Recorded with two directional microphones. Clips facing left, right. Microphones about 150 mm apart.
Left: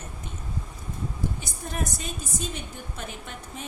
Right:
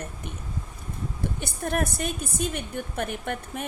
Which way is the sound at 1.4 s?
60° right (ahead or behind).